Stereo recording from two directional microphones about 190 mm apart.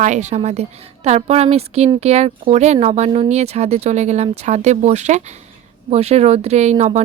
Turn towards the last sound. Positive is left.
turn(degrees=-35)  # may be behind; listen again after turning